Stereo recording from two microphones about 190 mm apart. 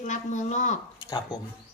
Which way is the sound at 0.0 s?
40° left (ahead or behind).